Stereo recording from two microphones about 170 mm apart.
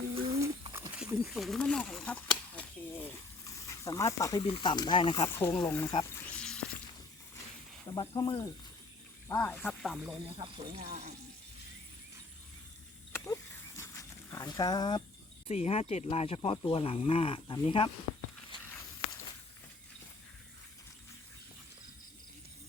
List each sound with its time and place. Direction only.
0.7 s wild animals: 10° right (ahead or behind)
1.2 s a sound: centre (ahead or behind); by 4.4 s 20° left (ahead or behind)
4.4 s speech: 30° left (ahead or behind)
6.3 s a sound: 5° left (ahead or behind)
7.9 s speech: 25° left (ahead or behind)
9.3 s speech: 15° left (ahead or behind)
10.3 s speech: 30° right (ahead or behind)
13.1 s a sound: 15° left (ahead or behind)
15.4 s speech: 35° left (ahead or behind)